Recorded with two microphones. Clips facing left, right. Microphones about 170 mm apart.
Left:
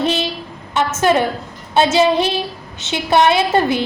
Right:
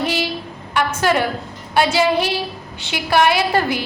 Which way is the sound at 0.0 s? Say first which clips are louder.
Left 3 dB; 20° left (ahead or behind).